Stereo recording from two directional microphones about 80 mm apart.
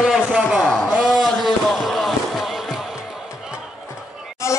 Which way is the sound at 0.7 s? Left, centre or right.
Centre.